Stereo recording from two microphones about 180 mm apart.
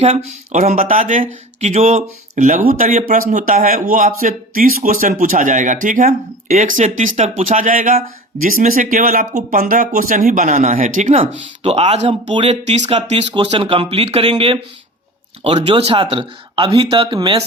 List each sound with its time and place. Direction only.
0.5 s a man's voice: 45° right (ahead or behind); by 17.4 s 25° right (ahead or behind)